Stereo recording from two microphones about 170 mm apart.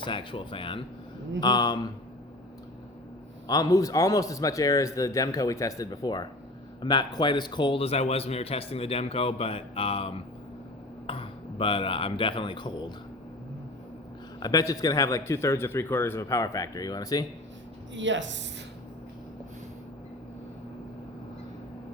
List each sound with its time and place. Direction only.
0.0 s a man's voice: 30° left (ahead or behind)
3.4 s a man's voice: 20° left (ahead or behind)
14.3 s a man's voice: 25° left (ahead or behind)
17.9 s speech: 90° right